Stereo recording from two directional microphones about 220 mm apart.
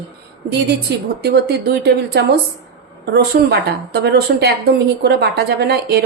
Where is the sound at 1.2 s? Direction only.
45° right (ahead or behind).